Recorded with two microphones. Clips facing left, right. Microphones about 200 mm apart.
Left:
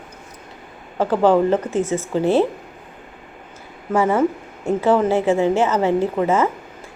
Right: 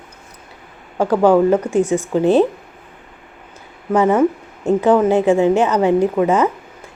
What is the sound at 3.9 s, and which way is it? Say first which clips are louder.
A woman's voice: right 3 dB; 20° right (ahead or behind).